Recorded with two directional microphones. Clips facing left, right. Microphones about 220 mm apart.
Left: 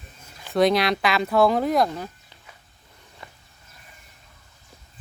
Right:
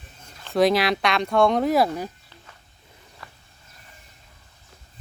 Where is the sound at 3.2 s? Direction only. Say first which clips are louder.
Left 1 dB; 20° left (ahead or behind).